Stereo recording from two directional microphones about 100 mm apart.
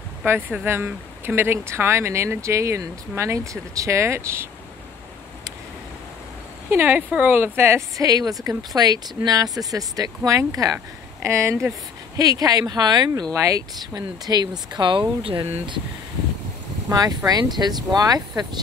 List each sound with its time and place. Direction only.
0.2 s speech: 20° right (ahead or behind)
6.7 s speech: 20° right (ahead or behind)
8.0 s speech: 40° right (ahead or behind)
12.2 s speech: 40° right (ahead or behind)
13.3 s speech: 30° right (ahead or behind); by 15.4 s 55° right (ahead or behind)
17.3 s speech: 45° right (ahead or behind)